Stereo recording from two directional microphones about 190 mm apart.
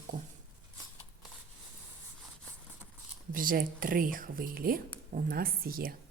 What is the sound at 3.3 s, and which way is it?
Speech, 45° right (ahead or behind).